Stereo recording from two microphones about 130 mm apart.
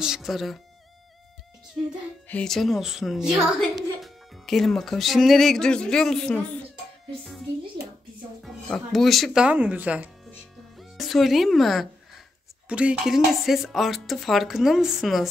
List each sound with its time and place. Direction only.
0.0 s speech: 5° right (ahead or behind)
2.2 s a woman's voice: 5° left (ahead or behind)
8.4 s speech: centre (ahead or behind)
10.8 s speech: centre (ahead or behind)